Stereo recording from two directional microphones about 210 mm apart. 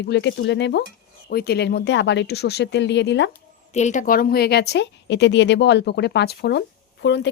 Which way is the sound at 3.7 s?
35° left (ahead or behind).